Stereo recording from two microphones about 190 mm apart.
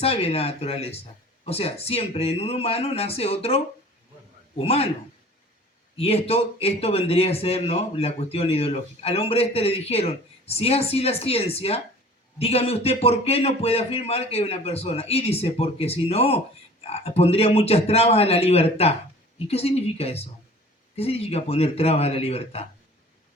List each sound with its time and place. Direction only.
0.0 s a man's voice: 30° left (ahead or behind)
6.0 s a man's voice: 30° left (ahead or behind)